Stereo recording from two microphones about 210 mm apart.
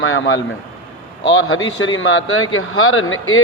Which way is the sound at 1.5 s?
70° left (ahead or behind).